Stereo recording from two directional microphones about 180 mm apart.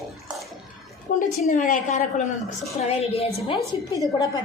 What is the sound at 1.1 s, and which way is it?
A woman's voice, 50° left (ahead or behind).